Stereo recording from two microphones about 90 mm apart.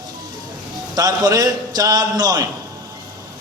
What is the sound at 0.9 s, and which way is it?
A man's voice, 40° right (ahead or behind).